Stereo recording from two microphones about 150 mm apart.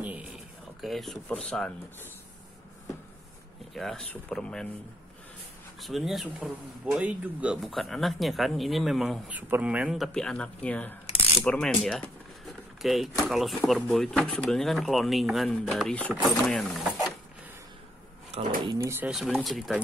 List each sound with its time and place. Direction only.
0.0 s a sound: 10° right (ahead or behind)
0.7 s speech: centre (ahead or behind)
3.7 s speech: centre (ahead or behind)
5.8 s speech: centre (ahead or behind)
12.4 s a sound: centre (ahead or behind)
13.2 s speech: centre (ahead or behind)
18.8 s speech: 15° right (ahead or behind)
19.0 s speech: 5° right (ahead or behind)